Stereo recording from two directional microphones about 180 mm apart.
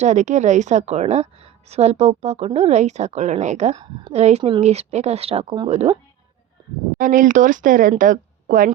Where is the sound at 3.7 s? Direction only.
25° right (ahead or behind).